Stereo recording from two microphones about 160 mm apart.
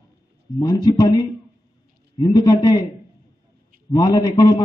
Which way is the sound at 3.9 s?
25° left (ahead or behind).